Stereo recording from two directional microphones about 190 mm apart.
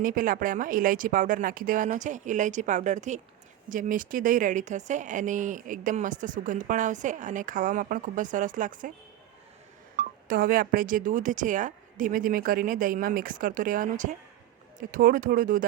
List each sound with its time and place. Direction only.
0.0 s speech: 45° right (ahead or behind)
10.2 s speech: 50° right (ahead or behind)